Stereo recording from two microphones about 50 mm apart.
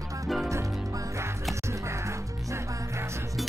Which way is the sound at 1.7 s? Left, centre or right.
Right.